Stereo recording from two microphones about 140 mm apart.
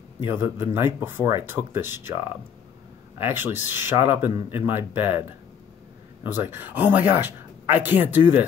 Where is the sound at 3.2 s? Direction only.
15° right (ahead or behind).